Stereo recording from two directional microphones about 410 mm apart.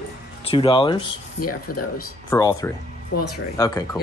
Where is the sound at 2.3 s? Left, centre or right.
Centre.